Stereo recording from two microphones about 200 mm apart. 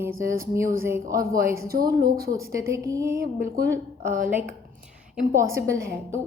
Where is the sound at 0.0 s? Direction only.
15° right (ahead or behind).